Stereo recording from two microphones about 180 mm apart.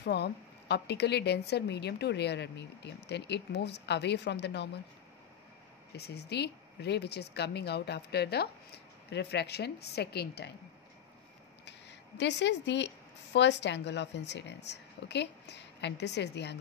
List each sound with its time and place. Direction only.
0.0 s a woman's voice: 65° left (ahead or behind)
5.9 s speech: 65° left (ahead or behind)
12.2 s a woman's voice: 75° left (ahead or behind)